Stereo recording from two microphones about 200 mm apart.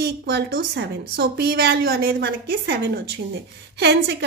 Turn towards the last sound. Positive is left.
turn(degrees=-55)  # may be behind; listen again after turning